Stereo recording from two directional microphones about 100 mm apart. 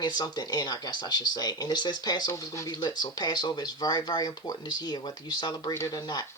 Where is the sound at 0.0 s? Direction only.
45° left (ahead or behind).